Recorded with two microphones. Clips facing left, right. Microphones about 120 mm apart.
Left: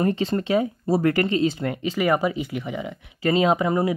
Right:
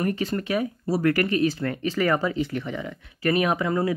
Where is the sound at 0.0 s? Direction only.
25° left (ahead or behind).